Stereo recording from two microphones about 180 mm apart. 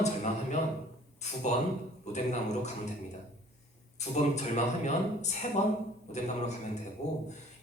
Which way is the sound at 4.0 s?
40° left (ahead or behind).